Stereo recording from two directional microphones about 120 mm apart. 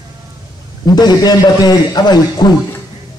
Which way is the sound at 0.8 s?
35° left (ahead or behind).